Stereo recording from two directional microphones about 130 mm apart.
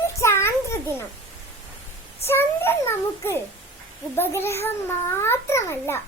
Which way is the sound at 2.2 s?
15° left (ahead or behind).